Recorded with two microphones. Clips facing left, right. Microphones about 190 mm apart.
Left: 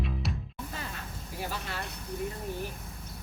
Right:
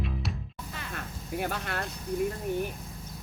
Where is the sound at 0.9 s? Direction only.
60° right (ahead or behind).